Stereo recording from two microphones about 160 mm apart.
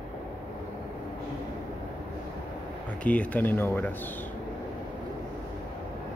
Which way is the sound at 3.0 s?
10° left (ahead or behind).